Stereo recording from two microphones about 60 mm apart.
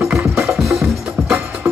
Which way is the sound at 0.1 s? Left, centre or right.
Right.